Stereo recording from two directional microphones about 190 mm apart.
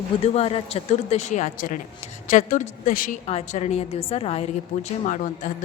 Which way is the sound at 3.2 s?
35° left (ahead or behind).